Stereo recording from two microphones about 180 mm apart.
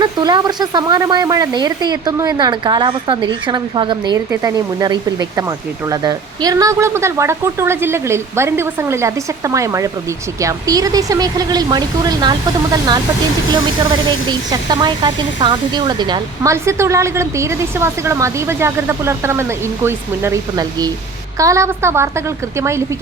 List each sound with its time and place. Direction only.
0.0 s speech: 20° right (ahead or behind)